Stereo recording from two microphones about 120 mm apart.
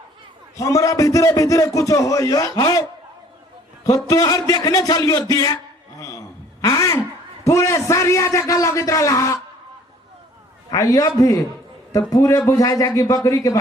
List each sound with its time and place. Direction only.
0.5 s speech: 30° left (ahead or behind)
3.8 s speech: 30° left (ahead or behind)
6.0 s a sound: 30° left (ahead or behind)
7.4 s speech: 25° left (ahead or behind)
10.7 s speech: 30° left (ahead or behind)